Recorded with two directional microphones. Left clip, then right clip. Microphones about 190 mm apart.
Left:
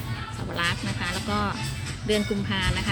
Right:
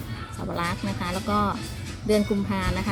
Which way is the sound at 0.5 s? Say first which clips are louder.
Left 2 dB; 30° right (ahead or behind).